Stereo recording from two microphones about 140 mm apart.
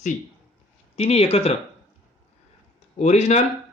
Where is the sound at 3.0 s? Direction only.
55° left (ahead or behind).